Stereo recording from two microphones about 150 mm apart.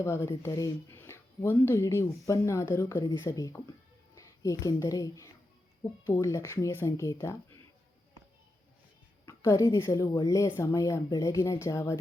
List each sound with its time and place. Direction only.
0.0 s speech: 20° left (ahead or behind)
3.0 s a woman's voice: 30° left (ahead or behind)
9.2 s a woman's voice: 20° left (ahead or behind)